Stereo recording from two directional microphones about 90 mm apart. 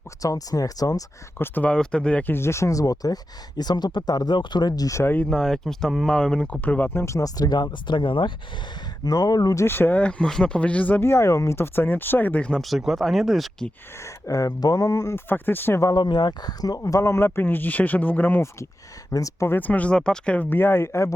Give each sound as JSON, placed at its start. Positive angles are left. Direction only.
{"t": 0.2, "sound": "speech", "side_deg": 40}
{"t": 1.4, "sound": "speech", "side_deg": 20}
{"t": 1.7, "sound": "speech", "side_deg": 10}
{"t": 2.3, "sound": "speech", "side_deg": 30}
{"t": 5.0, "sound": "speech", "side_deg": 20}
{"t": 5.3, "sound": "speech", "side_deg": 5}
{"t": 9.0, "sound": "speech", "side_deg": 45}
{"t": 9.6, "sound": "speech", "side_deg": 25}
{"t": 14.0, "sound": "speech", "side_deg": 40}
{"t": 15.3, "sound": "speech", "side_deg": 25}
{"t": 15.8, "sound": "speech", "side_deg": 50}
{"t": 19.1, "sound": "speech", "side_deg": 40}
{"t": 19.5, "sound": "speech", "side_deg": 20}